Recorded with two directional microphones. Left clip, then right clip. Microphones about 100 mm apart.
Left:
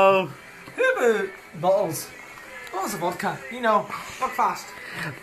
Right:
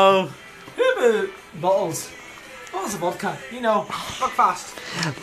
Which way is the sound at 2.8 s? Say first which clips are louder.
Right 1 dB; 20° left (ahead or behind).